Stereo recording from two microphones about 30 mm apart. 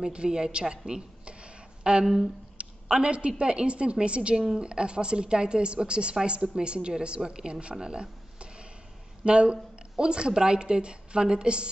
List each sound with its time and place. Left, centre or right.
0.1 s a woman's voice: right
4.4 s speech: right
7.8 s a sound: right
9.2 s speech: right